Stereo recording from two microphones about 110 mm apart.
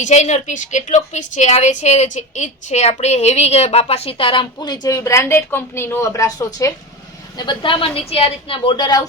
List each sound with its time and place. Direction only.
0.1 s a woman's voice: 90° left; by 4.9 s 40° left (ahead or behind)
4.9 s a woman's voice: 25° left (ahead or behind)
7.3 s a woman's voice: 45° left (ahead or behind)